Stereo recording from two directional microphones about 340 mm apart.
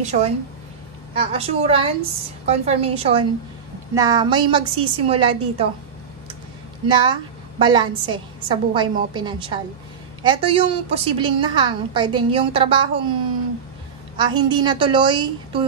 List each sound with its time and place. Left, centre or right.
0.0 s a woman's voice: centre
6.9 s a woman's voice: centre
14.1 s a woman's voice: centre